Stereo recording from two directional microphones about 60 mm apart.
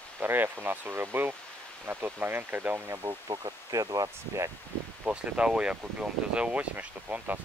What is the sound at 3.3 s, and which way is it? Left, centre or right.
Speech, right.